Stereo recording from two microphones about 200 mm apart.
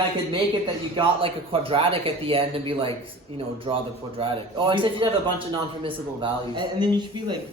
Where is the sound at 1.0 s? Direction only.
25° right (ahead or behind).